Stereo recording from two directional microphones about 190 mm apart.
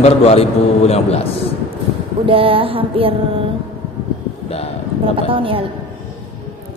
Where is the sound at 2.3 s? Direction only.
30° right (ahead or behind).